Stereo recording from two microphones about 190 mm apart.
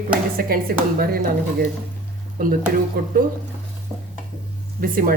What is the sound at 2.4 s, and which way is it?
Speech, 50° right (ahead or behind).